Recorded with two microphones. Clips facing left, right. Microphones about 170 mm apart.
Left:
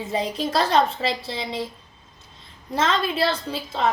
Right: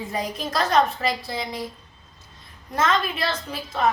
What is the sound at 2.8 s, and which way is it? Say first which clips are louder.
A woman's voice: left 1 dB; 30° left (ahead or behind).